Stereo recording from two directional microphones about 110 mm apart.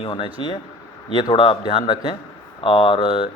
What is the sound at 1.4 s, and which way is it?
A man's voice, 50° left (ahead or behind).